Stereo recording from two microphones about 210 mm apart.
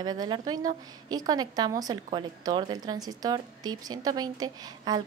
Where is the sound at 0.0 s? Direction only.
20° right (ahead or behind).